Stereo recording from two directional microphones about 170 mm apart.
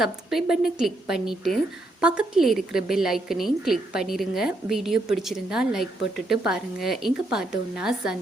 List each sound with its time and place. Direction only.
0.0 s a woman's voice: centre (ahead or behind)